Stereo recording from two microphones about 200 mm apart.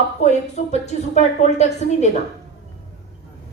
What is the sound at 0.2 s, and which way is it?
A woman's voice, 35° left (ahead or behind).